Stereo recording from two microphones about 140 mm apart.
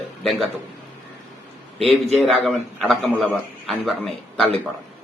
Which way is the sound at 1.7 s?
45° right (ahead or behind).